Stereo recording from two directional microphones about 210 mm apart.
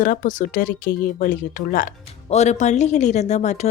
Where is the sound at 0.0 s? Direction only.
40° left (ahead or behind).